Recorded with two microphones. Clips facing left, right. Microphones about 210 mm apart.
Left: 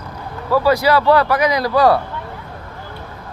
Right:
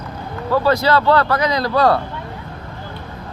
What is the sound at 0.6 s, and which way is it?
Speech, 15° left (ahead or behind).